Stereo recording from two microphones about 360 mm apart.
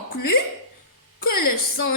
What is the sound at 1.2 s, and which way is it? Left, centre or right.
Speech, left.